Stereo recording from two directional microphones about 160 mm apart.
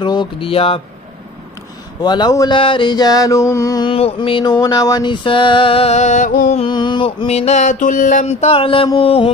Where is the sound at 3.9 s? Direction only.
35° left (ahead or behind); by 6.6 s 50° left (ahead or behind).